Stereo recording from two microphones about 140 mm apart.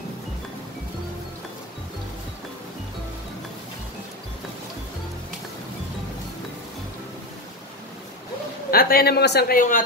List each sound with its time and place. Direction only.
8.6 s speech: 90° left; by 9.8 s 75° left (ahead or behind)